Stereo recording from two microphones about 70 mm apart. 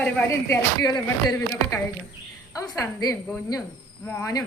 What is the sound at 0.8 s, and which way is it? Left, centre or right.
Speech, left.